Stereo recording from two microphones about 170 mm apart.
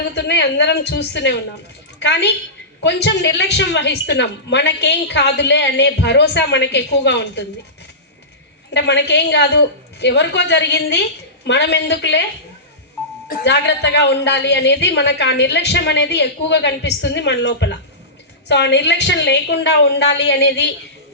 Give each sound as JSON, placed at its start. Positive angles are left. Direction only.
{"t": 0.1, "sound": "a woman's voice", "side_deg": 90}
{"t": 8.7, "sound": "a woman's voice", "side_deg": 90}
{"t": 13.2, "sound": "a woman's voice", "side_deg": 70}